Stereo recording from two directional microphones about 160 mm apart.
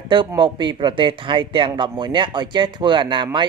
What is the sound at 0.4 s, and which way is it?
Speech, 30° right (ahead or behind).